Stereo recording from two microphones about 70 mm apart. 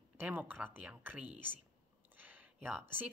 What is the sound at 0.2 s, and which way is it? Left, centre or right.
Speech, right.